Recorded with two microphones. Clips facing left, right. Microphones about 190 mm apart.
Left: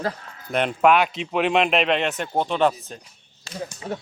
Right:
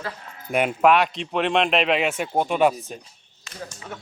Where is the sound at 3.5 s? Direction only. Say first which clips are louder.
Left 6 dB; 30° left (ahead or behind).